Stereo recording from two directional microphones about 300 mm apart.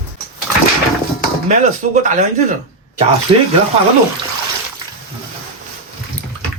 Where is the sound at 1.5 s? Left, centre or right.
Right.